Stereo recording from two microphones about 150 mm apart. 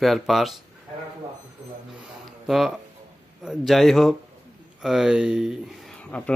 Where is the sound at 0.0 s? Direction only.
Centre (ahead or behind).